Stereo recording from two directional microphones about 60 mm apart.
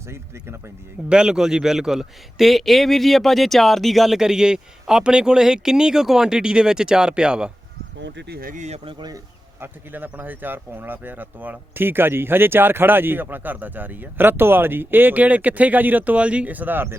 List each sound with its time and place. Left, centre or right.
1.1 s a man's voice: centre
9.6 s speech: right